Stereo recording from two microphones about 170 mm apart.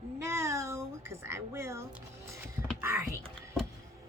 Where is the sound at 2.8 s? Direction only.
15° right (ahead or behind).